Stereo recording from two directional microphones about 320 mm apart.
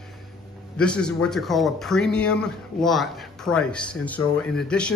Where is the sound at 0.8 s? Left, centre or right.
Centre.